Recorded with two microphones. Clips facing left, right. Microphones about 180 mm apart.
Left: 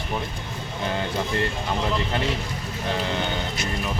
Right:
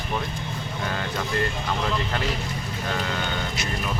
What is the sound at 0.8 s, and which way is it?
Speech, 20° left (ahead or behind).